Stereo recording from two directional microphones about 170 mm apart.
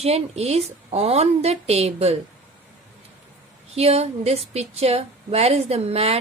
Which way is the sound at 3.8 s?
35° right (ahead or behind).